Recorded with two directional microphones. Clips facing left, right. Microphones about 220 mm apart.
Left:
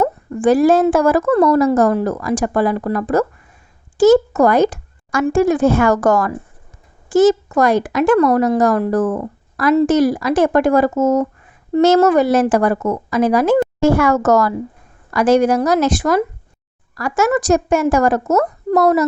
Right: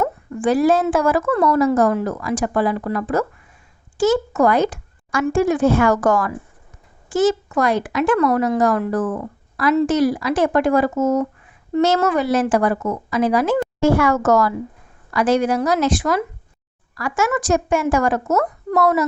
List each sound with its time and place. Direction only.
0.0 s a woman's voice: 40° left (ahead or behind)